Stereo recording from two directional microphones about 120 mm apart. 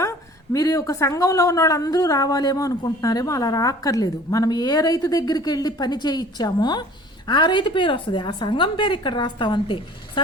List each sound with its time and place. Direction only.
0.5 s speech: 30° left (ahead or behind)